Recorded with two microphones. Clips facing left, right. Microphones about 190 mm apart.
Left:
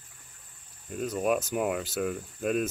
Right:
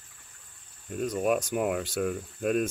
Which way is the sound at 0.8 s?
Centre (ahead or behind).